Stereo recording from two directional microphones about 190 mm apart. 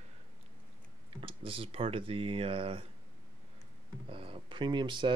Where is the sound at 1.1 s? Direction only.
30° right (ahead or behind).